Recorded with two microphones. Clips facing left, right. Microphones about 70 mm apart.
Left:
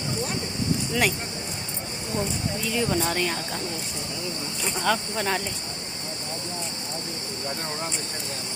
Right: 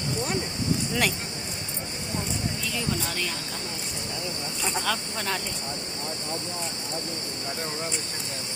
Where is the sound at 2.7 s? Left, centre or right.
Left.